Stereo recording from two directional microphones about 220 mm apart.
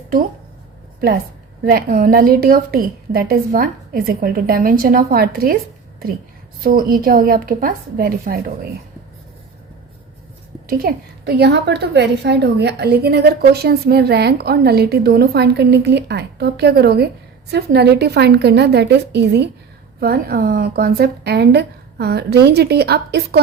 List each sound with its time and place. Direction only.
1.6 s a woman's voice: 45° right (ahead or behind)
6.6 s a woman's voice: 40° right (ahead or behind)
10.7 s a woman's voice: 45° right (ahead or behind)